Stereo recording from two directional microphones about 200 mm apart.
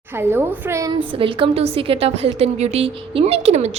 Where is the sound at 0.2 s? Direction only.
10° right (ahead or behind).